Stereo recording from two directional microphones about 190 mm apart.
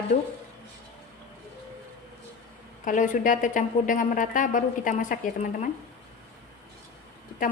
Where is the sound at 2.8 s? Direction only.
40° left (ahead or behind).